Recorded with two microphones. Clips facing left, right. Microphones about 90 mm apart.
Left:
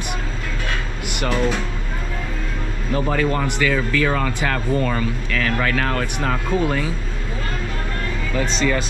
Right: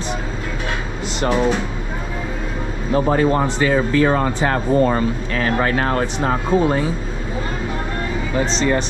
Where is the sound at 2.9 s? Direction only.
25° right (ahead or behind).